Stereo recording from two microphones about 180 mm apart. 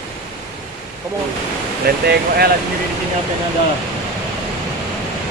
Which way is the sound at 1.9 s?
60° right (ahead or behind).